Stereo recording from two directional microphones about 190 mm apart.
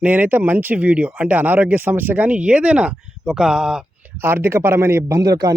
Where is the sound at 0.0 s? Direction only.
10° right (ahead or behind).